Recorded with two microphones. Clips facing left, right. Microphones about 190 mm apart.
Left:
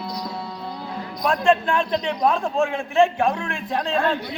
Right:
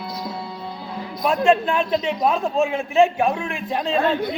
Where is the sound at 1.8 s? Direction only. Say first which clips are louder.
Right 1 dB; 5° right (ahead or behind).